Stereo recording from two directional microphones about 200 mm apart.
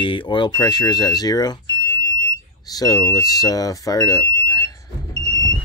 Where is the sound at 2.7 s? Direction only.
15° left (ahead or behind).